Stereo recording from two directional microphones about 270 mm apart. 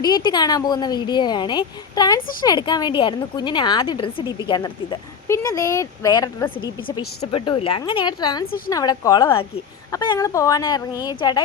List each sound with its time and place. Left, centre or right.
0.0 s speech: centre
8.4 s a woman's voice: left
8.7 s speech: centre